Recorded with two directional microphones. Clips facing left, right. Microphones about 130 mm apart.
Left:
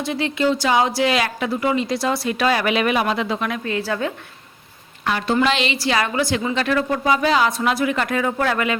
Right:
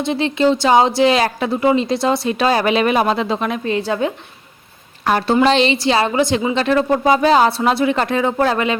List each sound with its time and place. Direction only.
0.0 s a woman's voice: 25° right (ahead or behind)
5.2 s a woman's voice: 35° right (ahead or behind)